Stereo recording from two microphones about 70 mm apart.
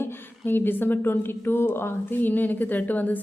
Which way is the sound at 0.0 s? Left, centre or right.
Left.